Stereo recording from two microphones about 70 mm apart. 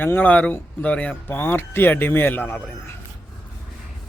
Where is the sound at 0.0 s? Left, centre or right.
Left.